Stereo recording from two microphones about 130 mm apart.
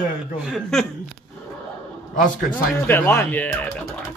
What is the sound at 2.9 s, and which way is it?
Speech, 15° left (ahead or behind).